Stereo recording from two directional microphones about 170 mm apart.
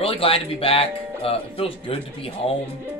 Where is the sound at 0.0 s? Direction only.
35° left (ahead or behind).